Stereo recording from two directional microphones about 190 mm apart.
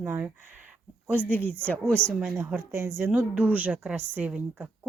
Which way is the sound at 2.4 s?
10° right (ahead or behind).